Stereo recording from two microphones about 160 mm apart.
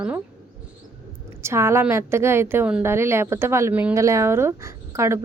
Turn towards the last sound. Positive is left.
turn(degrees=-20)  # may be behind; listen again after turning